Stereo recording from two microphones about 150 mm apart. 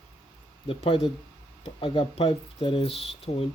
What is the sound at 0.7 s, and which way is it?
Speech, 40° left (ahead or behind).